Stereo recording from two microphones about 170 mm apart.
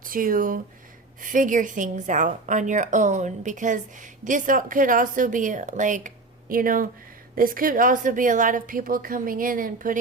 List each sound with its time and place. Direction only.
0.0 s a woman's voice: 55° right (ahead or behind)